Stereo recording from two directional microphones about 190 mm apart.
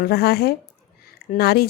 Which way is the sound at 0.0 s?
55° left (ahead or behind).